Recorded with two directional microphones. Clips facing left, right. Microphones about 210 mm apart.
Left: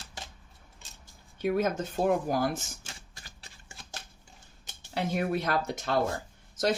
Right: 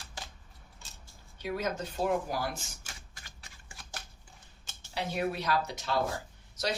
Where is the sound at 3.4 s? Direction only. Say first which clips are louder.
Left 2 dB; 30° left (ahead or behind).